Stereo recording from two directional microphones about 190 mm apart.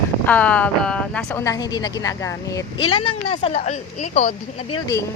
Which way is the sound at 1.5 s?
20° left (ahead or behind).